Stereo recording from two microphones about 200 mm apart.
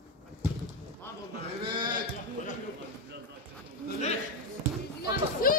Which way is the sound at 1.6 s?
25° right (ahead or behind).